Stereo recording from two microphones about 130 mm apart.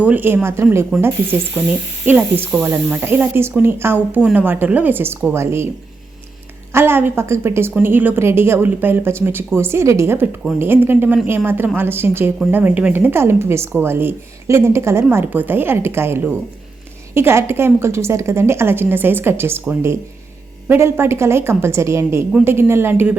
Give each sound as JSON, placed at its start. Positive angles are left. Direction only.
{"t": 0.0, "sound": "speech", "side_deg": -15}
{"t": 2.0, "sound": "speech", "side_deg": -15}
{"t": 6.7, "sound": "a woman's voice", "side_deg": -15}